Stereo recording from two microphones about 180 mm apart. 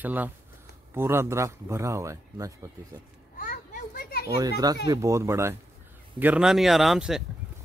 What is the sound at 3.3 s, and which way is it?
Children playing, 50° left (ahead or behind).